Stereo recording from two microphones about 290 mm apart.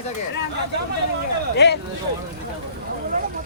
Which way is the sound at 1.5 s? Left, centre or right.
Left.